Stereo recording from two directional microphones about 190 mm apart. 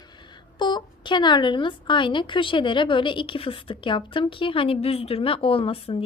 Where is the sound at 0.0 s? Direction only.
25° left (ahead or behind).